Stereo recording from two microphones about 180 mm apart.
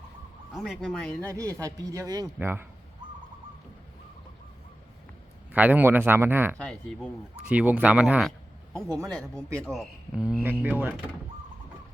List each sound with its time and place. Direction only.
0.5 s speech: centre (ahead or behind)
1.3 s a man's voice: 15° right (ahead or behind)
5.5 s a man's voice: 10° right (ahead or behind)
6.6 s speech: 5° left (ahead or behind)
7.4 s a man's voice: 10° right (ahead or behind)
9.0 s speech: 5° left (ahead or behind)